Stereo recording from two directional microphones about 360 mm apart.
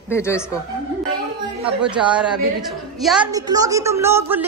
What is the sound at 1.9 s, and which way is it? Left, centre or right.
A woman's voice, centre.